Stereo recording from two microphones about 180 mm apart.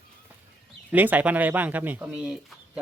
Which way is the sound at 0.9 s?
10° right (ahead or behind).